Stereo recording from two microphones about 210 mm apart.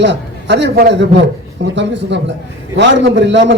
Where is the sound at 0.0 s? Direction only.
55° right (ahead or behind).